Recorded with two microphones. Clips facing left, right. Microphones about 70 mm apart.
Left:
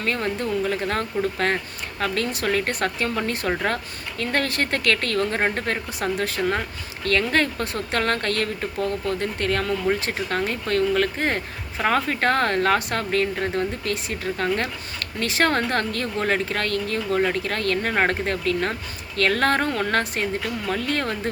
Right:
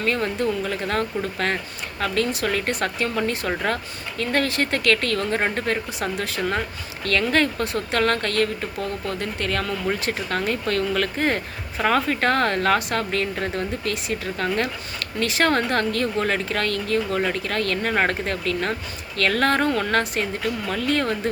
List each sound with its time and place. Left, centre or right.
0.0 s a woman's voice: left